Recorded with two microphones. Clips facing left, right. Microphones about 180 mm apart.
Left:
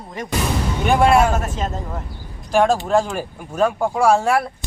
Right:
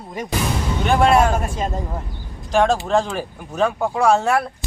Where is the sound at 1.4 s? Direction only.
10° right (ahead or behind).